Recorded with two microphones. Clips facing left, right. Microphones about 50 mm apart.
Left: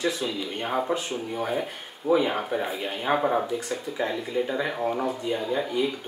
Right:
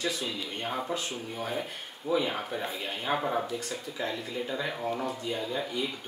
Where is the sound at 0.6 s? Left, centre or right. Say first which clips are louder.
Left 7 dB; left.